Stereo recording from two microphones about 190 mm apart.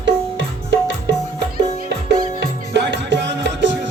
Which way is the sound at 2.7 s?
70° right (ahead or behind).